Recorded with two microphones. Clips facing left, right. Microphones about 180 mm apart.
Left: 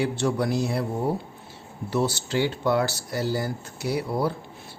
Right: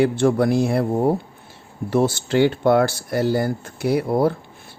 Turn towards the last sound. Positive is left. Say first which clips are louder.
# right 7 dB
turn(degrees=-55)  # may be behind; listen again after turning